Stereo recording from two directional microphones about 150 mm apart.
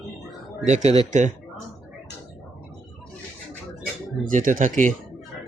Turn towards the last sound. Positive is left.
turn(degrees=-55)  # may be behind; listen again after turning